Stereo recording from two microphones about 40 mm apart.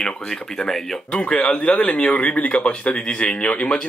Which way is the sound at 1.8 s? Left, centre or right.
Left.